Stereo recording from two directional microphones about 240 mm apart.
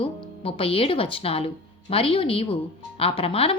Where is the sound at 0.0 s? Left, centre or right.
Left.